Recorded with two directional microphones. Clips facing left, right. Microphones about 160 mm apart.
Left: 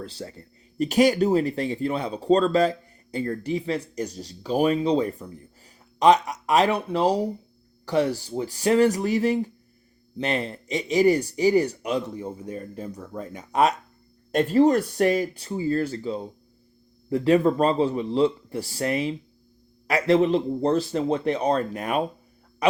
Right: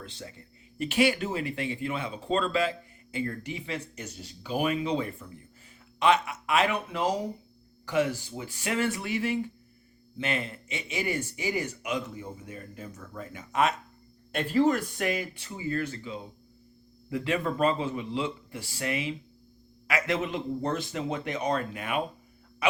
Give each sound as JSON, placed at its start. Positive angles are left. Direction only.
{"t": 0.0, "sound": "speech", "side_deg": 40}